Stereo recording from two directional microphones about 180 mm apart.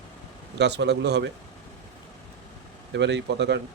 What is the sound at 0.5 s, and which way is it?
Speech, 70° right (ahead or behind).